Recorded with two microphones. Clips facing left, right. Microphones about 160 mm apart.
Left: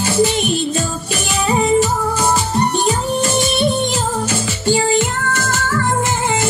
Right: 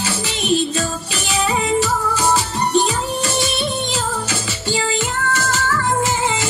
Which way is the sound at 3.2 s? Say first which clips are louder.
Left 5 dB; 50° left (ahead or behind).